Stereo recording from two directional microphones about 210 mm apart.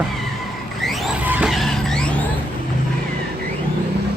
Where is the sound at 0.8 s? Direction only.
Centre (ahead or behind).